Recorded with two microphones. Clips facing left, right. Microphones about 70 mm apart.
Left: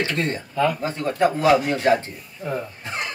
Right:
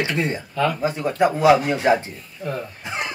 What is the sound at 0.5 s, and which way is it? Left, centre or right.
Speech, centre.